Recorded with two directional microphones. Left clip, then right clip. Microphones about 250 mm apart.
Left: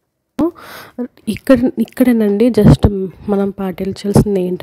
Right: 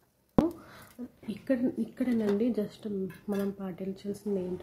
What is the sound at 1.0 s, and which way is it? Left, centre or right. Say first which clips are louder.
A woman's voice: left 19 dB; left.